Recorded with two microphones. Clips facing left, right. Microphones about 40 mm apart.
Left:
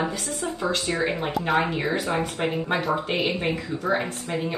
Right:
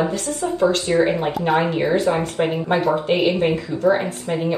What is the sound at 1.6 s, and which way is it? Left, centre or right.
Speech, right.